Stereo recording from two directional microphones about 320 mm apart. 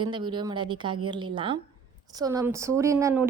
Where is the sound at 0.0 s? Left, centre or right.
Centre.